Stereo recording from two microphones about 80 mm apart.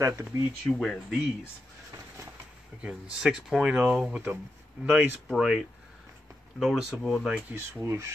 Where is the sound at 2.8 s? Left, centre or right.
Centre.